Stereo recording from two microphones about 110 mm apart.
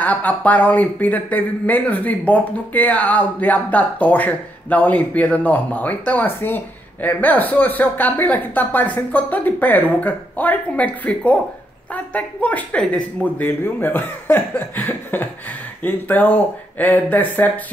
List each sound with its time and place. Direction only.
0.0 s speech: 15° left (ahead or behind)